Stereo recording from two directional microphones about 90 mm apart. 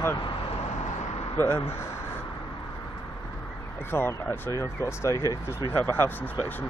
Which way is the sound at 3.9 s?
25° left (ahead or behind).